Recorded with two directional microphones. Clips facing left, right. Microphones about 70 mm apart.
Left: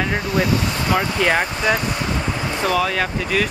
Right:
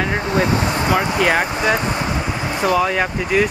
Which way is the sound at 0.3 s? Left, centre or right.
Right.